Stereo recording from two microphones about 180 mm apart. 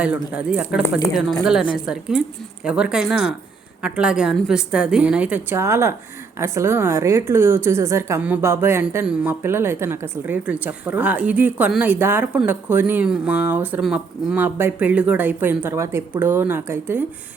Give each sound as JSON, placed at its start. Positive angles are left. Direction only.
{"t": 0.0, "sound": "a woman's voice", "side_deg": -5}